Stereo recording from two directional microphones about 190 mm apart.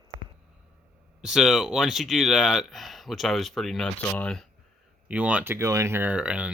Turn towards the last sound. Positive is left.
turn(degrees=-5)  # may be behind; listen again after turning